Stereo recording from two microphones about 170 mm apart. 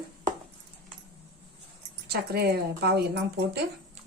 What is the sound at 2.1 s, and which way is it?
Speech, 70° right (ahead or behind).